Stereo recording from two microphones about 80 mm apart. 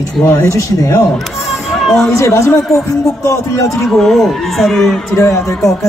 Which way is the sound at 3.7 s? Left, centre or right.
Centre.